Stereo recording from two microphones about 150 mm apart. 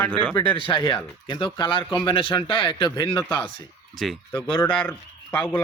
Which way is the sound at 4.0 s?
Centre (ahead or behind).